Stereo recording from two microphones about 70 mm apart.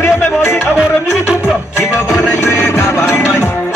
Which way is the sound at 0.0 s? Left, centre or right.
Left.